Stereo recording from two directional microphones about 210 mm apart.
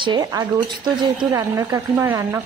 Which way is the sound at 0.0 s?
20° right (ahead or behind).